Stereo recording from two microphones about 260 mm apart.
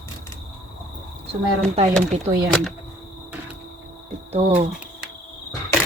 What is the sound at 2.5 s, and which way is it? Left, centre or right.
Speech, centre.